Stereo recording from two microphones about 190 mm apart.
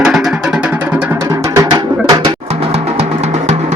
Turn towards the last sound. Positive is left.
turn(degrees=-35)  # may be behind; listen again after turning